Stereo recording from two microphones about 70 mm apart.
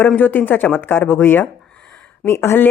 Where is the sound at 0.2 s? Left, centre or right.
Left.